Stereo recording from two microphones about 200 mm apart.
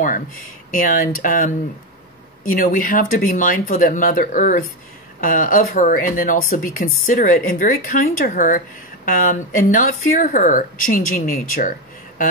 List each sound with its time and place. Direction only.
0.7 s speech: 45° left (ahead or behind)